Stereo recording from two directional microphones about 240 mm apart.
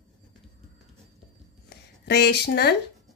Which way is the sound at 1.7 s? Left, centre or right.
Left.